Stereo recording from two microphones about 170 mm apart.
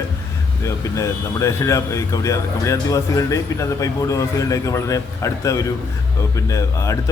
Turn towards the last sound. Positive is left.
turn(degrees=20)  # may be behind; listen again after turning